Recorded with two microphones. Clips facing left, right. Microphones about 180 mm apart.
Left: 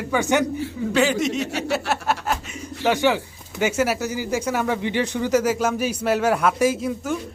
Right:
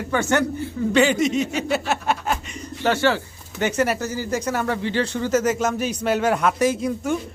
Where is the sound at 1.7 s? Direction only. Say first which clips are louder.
Even; centre (ahead or behind).